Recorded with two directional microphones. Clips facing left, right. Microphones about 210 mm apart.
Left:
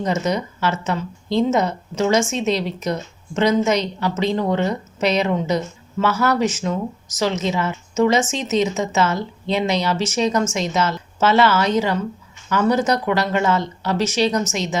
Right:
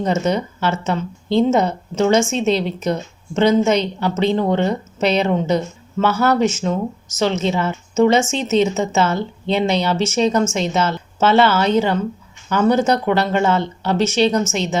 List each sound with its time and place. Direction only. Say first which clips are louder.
0.0 s speech: right 3 dB; 30° right (ahead or behind)